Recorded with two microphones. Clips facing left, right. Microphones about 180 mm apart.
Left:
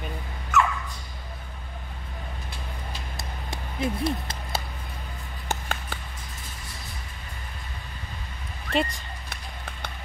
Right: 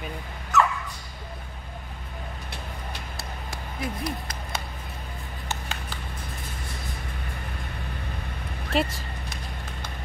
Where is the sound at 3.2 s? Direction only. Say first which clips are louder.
Even; 25° left (ahead or behind).